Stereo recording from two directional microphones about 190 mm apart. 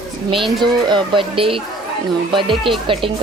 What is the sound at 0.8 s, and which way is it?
Speech, 25° right (ahead or behind).